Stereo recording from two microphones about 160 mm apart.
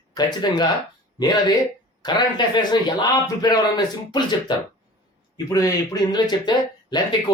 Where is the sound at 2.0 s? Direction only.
25° left (ahead or behind).